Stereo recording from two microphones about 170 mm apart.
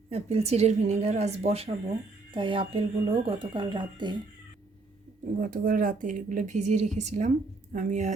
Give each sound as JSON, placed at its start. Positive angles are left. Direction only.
{"t": 0.1, "sound": "speech", "side_deg": -40}
{"t": 5.4, "sound": "speech", "side_deg": -55}